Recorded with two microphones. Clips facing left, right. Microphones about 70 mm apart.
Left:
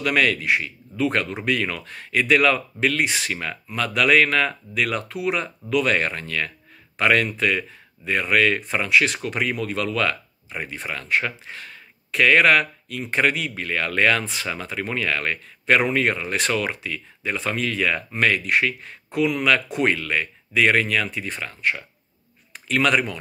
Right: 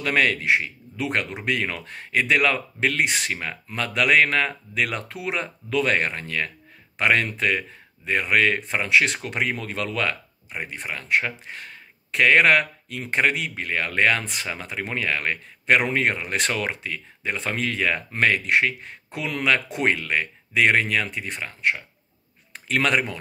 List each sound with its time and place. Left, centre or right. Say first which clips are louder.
0.0 s speech: left 1 dB; right
22.7 s speech: left 2 dB; right